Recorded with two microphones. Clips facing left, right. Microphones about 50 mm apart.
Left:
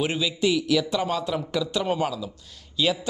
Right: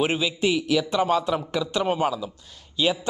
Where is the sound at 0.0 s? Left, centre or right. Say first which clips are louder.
Right 1 dB; right.